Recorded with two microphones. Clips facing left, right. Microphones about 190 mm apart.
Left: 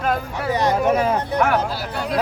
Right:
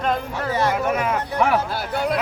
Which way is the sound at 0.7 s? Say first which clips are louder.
Left 4 dB; 35° left (ahead or behind).